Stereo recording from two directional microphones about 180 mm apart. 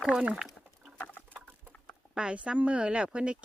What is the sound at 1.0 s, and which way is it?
Patter, 10° left (ahead or behind).